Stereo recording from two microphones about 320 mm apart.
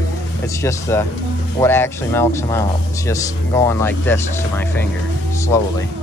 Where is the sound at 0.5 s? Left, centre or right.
Centre.